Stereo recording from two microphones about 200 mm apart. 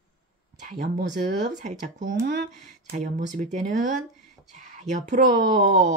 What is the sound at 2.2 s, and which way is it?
Speech, 60° right (ahead or behind).